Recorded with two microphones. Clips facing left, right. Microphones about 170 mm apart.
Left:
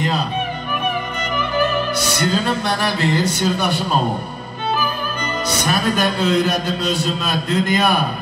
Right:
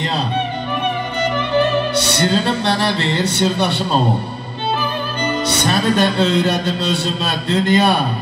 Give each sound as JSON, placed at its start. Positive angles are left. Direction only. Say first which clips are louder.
{"t": 2.0, "sound": "a man's voice", "louder": "right 3 dB", "side_deg": -30}
{"t": 3.2, "sound": "speech", "louder": "right 1 dB", "side_deg": -65}
{"t": 3.5, "sound": "a man's voice", "louder": "right 2 dB", "side_deg": -30}
{"t": 5.7, "sound": "a man's voice", "louder": "right 3 dB", "side_deg": -30}